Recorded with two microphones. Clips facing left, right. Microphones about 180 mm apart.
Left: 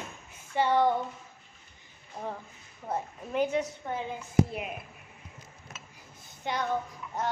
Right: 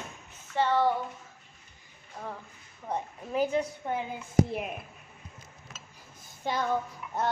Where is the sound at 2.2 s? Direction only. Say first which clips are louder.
Left 3 dB; 15° left (ahead or behind).